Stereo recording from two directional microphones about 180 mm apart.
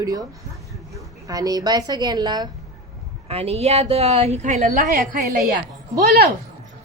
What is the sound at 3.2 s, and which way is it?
A woman's voice, 35° right (ahead or behind).